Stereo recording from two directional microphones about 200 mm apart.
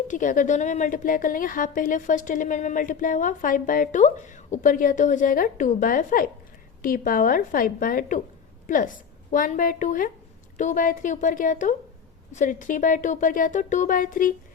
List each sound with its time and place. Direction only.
0.1 s a woman's voice: 40° left (ahead or behind)